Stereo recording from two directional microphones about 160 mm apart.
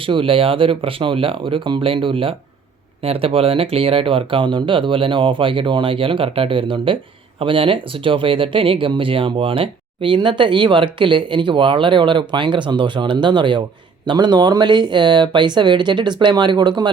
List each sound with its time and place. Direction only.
0.0 s speech: 35° right (ahead or behind)